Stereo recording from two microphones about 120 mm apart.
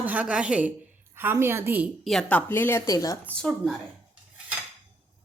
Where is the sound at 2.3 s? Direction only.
15° left (ahead or behind).